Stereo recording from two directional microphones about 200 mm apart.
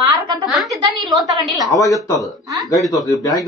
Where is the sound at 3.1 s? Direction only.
15° left (ahead or behind).